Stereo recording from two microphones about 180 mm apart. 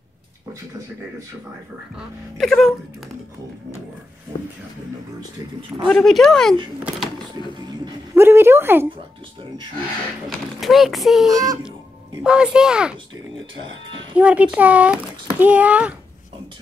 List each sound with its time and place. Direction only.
2.0 s speech: centre (ahead or behind)
5.9 s speech: centre (ahead or behind)
7.8 s speech: 15° right (ahead or behind)
10.6 s speech: centre (ahead or behind)
11.3 s a child's voice: 20° right (ahead or behind)
12.2 s speech: 5° right (ahead or behind)
14.1 s speech: 10° right (ahead or behind)